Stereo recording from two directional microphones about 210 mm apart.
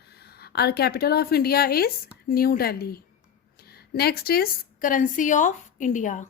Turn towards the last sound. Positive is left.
turn(degrees=35)  # may be behind; listen again after turning